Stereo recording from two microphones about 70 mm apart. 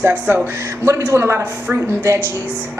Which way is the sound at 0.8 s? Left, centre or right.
Right.